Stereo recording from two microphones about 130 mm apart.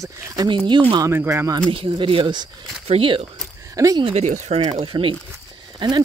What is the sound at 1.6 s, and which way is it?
Speech, 40° right (ahead or behind).